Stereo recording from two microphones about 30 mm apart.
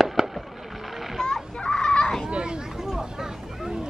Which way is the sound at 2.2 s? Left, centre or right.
Right.